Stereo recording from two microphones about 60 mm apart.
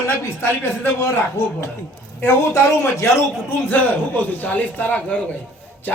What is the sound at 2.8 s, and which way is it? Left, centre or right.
Speech, left.